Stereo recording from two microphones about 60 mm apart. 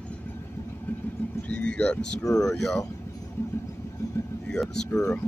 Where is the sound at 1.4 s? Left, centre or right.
Left.